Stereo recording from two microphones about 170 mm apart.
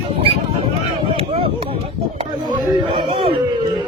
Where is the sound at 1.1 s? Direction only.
35° right (ahead or behind).